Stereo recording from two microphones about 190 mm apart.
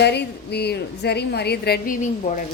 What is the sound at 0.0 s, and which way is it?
A woman's voice, 60° left (ahead or behind).